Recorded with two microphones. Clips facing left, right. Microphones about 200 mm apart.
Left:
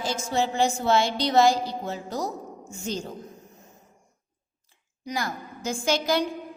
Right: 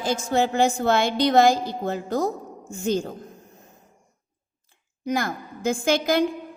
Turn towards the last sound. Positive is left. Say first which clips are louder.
# right 3 dB
turn(degrees=-55)  # may be behind; listen again after turning